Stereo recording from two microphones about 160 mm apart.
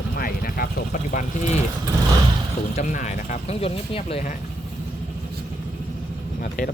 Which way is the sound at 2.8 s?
50° left (ahead or behind).